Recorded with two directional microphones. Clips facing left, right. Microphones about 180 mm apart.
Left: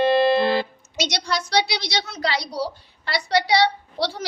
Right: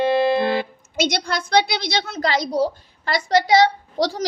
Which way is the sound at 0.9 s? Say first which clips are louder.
Right 3 dB; 50° right (ahead or behind).